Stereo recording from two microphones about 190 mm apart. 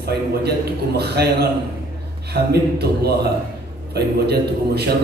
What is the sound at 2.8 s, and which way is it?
Speech, 55° right (ahead or behind).